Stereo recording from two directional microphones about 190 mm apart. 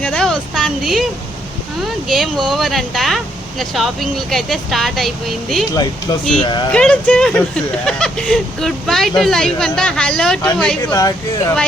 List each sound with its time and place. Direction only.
0.0 s speech: 5° left (ahead or behind)
2.0 s speech: centre (ahead or behind)
6.4 s speech: 25° left (ahead or behind)
6.7 s speech: 5° left (ahead or behind)
10.9 s speech: 20° left (ahead or behind)